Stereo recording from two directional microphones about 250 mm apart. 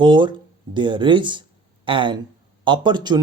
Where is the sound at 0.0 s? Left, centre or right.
Centre.